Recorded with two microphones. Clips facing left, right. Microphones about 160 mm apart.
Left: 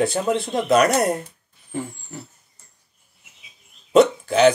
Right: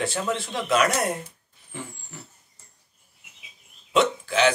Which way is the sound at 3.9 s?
40° left (ahead or behind).